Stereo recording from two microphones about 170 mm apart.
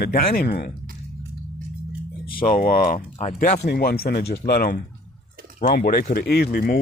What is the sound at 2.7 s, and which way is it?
Speech, 55° left (ahead or behind).